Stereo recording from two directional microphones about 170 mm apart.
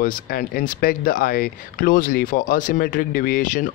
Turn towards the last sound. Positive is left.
turn(degrees=55)  # may be behind; listen again after turning